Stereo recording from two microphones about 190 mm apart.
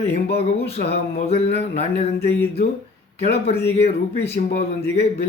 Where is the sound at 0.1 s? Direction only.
35° left (ahead or behind).